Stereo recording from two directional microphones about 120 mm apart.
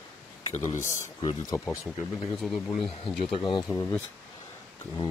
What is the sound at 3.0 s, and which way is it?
Speech, 45° left (ahead or behind).